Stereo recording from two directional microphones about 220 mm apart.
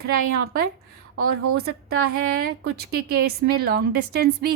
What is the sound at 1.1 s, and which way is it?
Speech, 75° right (ahead or behind).